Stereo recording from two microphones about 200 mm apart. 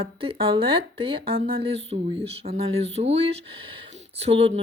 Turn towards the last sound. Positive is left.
turn(degrees=-30)  # may be behind; listen again after turning